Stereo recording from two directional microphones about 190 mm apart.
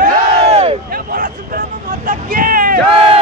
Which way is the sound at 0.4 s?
35° right (ahead or behind).